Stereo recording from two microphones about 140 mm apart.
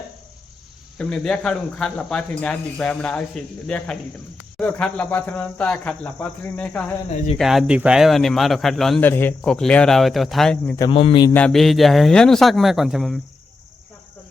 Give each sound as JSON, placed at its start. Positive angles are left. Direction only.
{"t": 0.9, "sound": "speech", "side_deg": 5}
{"t": 7.3, "sound": "speech", "side_deg": 0}
{"t": 9.0, "sound": "speech", "side_deg": 15}
{"t": 10.9, "sound": "a man's voice", "side_deg": 40}
{"t": 11.3, "sound": "speech", "side_deg": 5}